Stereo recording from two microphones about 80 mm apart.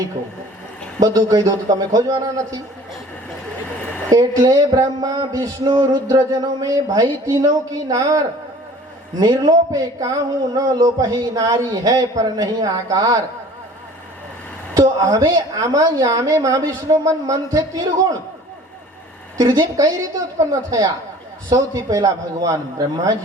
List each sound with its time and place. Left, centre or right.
0.9 s speech: right
4.1 s speech: right
9.2 s a man's voice: right
9.5 s speech: right
14.8 s speech: right
19.4 s speech: right